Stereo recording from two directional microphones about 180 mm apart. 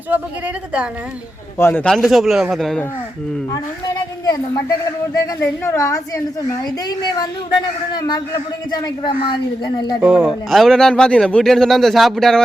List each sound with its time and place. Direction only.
0.1 s speech: 5° right (ahead or behind)
1.5 s speech: 10° left (ahead or behind)
3.5 s a woman's voice: 20° left (ahead or behind)
10.0 s speech: 5° right (ahead or behind)